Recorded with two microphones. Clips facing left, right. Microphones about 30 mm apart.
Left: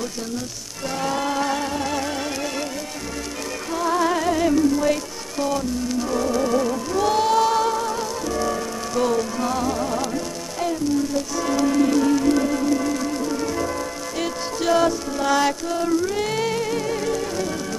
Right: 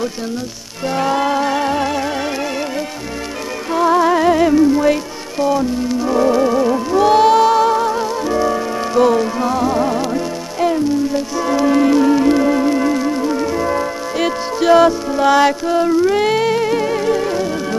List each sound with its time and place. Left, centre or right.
0.8 s music: right
3.7 s music: right